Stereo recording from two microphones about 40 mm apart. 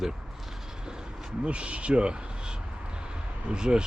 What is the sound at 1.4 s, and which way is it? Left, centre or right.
Speech, right.